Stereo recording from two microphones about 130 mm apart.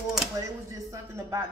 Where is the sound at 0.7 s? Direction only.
25° right (ahead or behind).